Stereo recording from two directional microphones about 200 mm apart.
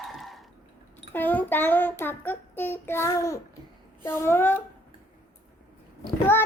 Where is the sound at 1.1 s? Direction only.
10° left (ahead or behind).